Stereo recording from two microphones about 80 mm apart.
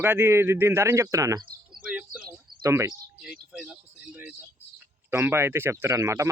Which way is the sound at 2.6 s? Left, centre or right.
Right.